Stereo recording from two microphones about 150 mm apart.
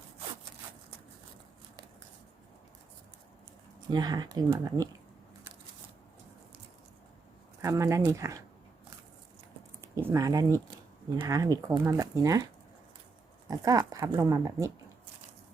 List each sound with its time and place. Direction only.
3.8 s speech: 25° right (ahead or behind)
7.6 s speech: 20° right (ahead or behind)
9.8 s speech: 20° right (ahead or behind)
13.5 s speech: 25° right (ahead or behind)